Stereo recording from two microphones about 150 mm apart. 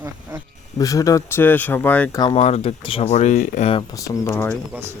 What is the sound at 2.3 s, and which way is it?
Speech, 45° left (ahead or behind).